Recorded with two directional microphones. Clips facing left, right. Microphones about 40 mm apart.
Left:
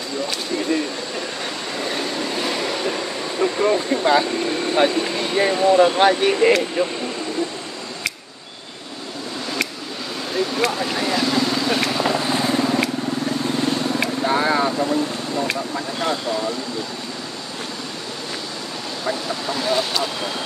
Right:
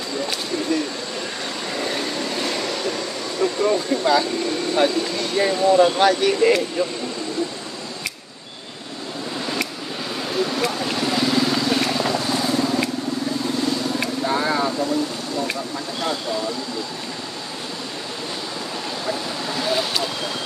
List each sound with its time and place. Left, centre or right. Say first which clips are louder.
1.7 s vehicle: even; centre; by 4.3 s left
4.7 s speech: left 1 dB; left
10.5 s vehicle: left 2 dB; centre
11.9 s vehicle: left 1 dB; centre; by 12.7 s left
14.2 s vehicle: left 3 dB; left
19.5 s vehicle: left 1 dB; centre